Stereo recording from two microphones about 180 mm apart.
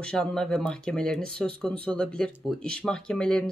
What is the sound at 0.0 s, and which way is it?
Speech, 5° left (ahead or behind).